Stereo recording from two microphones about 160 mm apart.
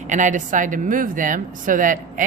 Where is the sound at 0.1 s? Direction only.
50° right (ahead or behind).